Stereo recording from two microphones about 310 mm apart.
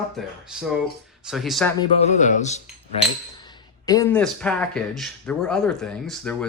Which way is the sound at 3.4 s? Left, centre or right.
Centre.